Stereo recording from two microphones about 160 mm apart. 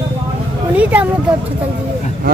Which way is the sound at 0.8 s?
10° right (ahead or behind).